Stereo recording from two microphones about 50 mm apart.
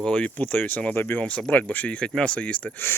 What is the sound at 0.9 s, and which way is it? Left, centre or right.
Speech, left.